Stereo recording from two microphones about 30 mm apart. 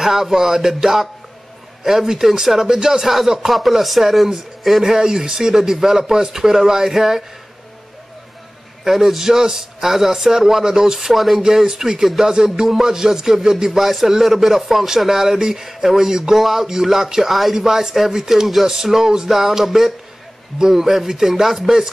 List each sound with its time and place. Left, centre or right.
0.0 s speech: centre
3.4 s speech: centre
4.8 s speech: centre
8.8 s speech: centre
11.4 s speech: centre
17.6 s speech: centre
21.6 s chopping: right